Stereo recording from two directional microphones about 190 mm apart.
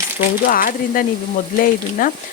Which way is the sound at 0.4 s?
50° left (ahead or behind).